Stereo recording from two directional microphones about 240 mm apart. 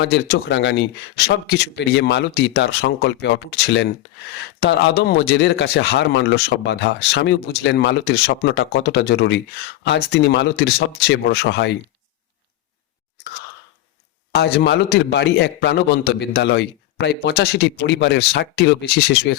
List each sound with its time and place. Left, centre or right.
0.0 s speech: left
14.3 s speech: left